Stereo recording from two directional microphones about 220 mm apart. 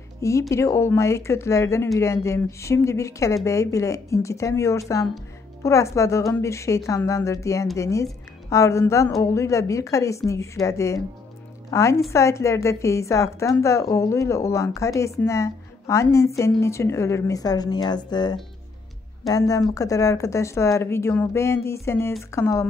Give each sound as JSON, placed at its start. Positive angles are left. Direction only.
{"t": 0.2, "sound": "speech", "side_deg": 15}